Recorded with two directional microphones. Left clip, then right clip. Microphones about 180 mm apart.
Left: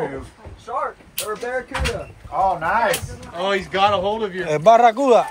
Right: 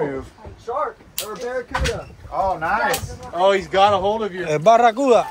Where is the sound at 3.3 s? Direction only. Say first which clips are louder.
Right 4 dB; 40° right (ahead or behind).